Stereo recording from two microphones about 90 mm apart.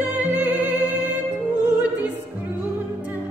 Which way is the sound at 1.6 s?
15° right (ahead or behind).